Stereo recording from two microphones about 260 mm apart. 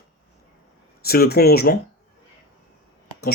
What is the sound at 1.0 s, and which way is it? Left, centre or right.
Speech, left.